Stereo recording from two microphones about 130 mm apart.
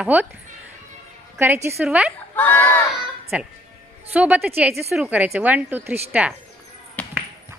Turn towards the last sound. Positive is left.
turn(degrees=10)  # may be behind; listen again after turning